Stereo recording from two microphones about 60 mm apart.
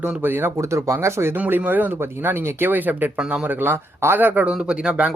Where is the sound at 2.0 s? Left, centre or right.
Right.